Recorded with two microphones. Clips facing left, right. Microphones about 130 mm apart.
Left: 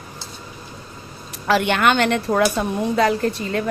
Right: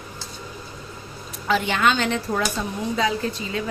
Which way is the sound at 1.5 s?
65° left (ahead or behind).